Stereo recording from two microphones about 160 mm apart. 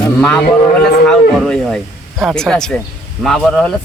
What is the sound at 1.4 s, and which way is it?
Speech, 5° left (ahead or behind).